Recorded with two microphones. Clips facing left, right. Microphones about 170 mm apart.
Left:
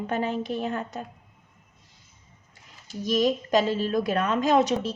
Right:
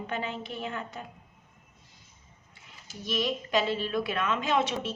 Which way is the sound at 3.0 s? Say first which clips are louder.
Left 7 dB; 45° left (ahead or behind).